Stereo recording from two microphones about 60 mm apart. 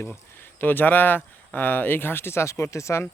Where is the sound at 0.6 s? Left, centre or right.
Left.